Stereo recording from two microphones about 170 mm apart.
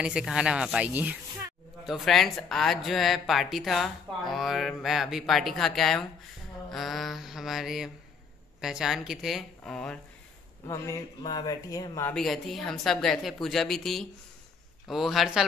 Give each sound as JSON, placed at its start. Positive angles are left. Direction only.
{"t": 0.0, "sound": "a woman's voice", "side_deg": -5}
{"t": 10.7, "sound": "speech", "side_deg": 20}
{"t": 12.1, "sound": "a woman's voice", "side_deg": 0}